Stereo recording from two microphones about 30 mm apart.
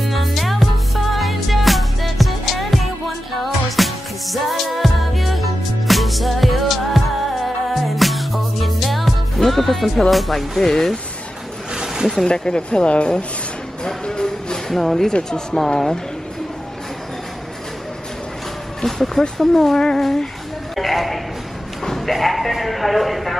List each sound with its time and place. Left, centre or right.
0.0 s music: centre
9.5 s speech: centre
11.7 s a sound: right
12.3 s speech: left
13.8 s music: left
14.7 s speech: centre
15.3 s speech: left
18.9 s speech: centre
20.7 s a sound: centre
21.8 s speech: centre